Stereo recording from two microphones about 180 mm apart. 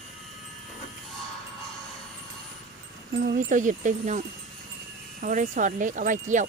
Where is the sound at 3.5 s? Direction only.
45° right (ahead or behind).